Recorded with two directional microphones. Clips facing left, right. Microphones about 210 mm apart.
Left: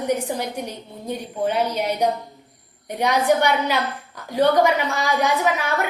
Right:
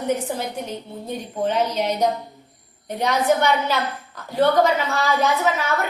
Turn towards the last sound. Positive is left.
turn(degrees=15)  # may be behind; listen again after turning